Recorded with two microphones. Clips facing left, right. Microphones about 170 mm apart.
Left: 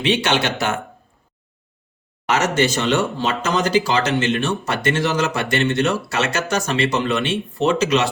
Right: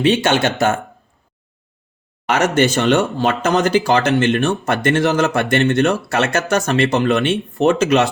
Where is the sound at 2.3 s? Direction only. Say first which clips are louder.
Right 3 dB; 55° right (ahead or behind).